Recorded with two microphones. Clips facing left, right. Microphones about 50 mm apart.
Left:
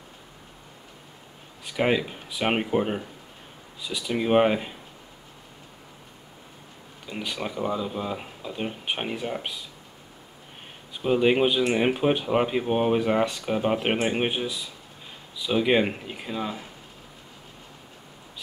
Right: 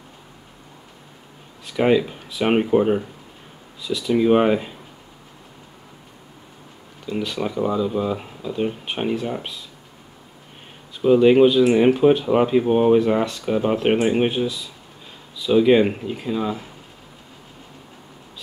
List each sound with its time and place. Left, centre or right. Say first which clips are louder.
1.7 s speech: right 6 dB; centre
7.1 s speech: right 7 dB; centre
7.3 s speech: right 6 dB; centre
11.1 s speech: right 8 dB; centre
13.6 s speech: right 6 dB; centre